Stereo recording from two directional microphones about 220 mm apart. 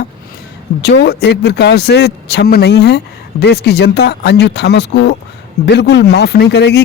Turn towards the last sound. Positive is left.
turn(degrees=50)  # may be behind; listen again after turning